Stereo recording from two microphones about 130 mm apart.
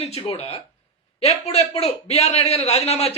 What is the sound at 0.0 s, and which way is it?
A man's voice, 50° left (ahead or behind).